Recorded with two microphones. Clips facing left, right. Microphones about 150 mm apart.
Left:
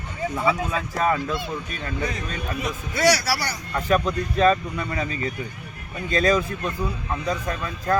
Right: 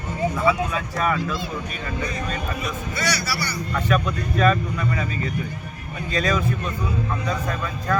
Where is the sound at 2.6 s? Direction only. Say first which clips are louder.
Left 5 dB; 90° left.